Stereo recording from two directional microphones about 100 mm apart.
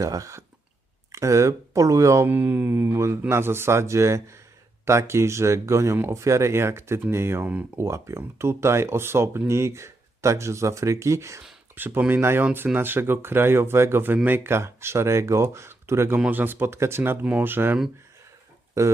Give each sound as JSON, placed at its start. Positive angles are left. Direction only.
{"t": 0.0, "sound": "speech", "side_deg": -35}
{"t": 2.2, "sound": "speech", "side_deg": -15}
{"t": 11.7, "sound": "speech", "side_deg": -20}
{"t": 18.8, "sound": "speech", "side_deg": -30}